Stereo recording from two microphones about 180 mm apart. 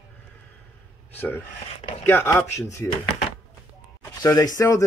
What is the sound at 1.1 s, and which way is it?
Speech, 10° left (ahead or behind).